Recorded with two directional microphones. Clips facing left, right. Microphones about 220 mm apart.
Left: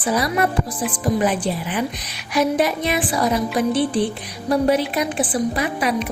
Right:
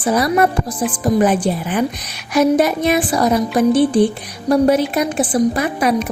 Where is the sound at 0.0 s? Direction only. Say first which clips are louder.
Right 5 dB; 45° right (ahead or behind).